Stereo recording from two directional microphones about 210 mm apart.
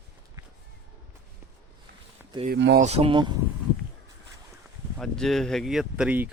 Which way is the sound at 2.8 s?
30° right (ahead or behind).